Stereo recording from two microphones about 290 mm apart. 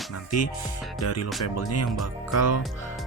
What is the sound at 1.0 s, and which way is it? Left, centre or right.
Speech, left.